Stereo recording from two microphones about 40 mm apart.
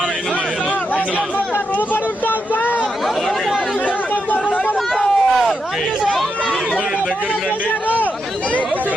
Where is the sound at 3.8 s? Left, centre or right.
Left.